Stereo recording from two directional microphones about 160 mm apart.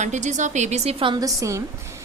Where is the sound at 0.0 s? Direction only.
50° right (ahead or behind); by 1.3 s 30° right (ahead or behind).